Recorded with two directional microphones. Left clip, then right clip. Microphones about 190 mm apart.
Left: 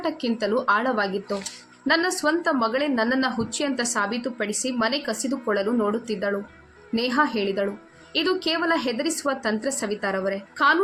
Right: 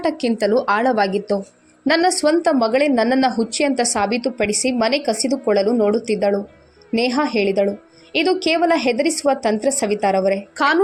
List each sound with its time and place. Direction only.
0.0 s a woman's voice: 25° right (ahead or behind)